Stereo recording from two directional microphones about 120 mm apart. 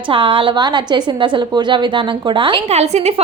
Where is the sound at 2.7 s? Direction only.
65° right (ahead or behind).